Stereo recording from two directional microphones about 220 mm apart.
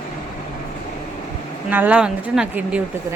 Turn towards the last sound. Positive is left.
turn(degrees=-5)  # may be behind; listen again after turning